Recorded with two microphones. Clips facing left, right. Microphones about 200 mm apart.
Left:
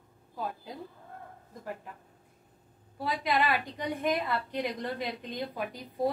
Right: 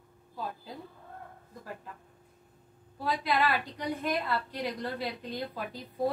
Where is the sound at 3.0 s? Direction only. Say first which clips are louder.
Even; 15° left (ahead or behind).